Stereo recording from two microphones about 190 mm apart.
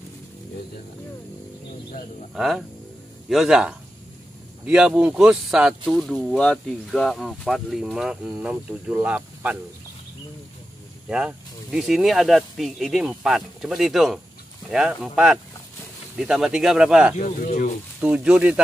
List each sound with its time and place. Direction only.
2.3 s speech: centre (ahead or behind)
11.1 s speech: 5° right (ahead or behind)
17.2 s speech: 45° left (ahead or behind)
18.0 s speech: 5° right (ahead or behind)